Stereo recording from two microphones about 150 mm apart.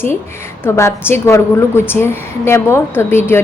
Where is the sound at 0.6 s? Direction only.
15° left (ahead or behind).